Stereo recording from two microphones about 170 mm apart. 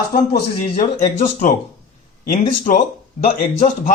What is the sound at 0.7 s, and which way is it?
Speech, 50° left (ahead or behind).